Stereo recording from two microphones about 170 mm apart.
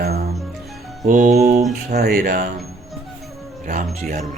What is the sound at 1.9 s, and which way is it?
Speech, 60° right (ahead or behind).